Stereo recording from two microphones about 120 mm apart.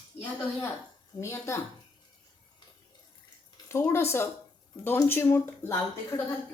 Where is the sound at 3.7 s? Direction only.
20° left (ahead or behind).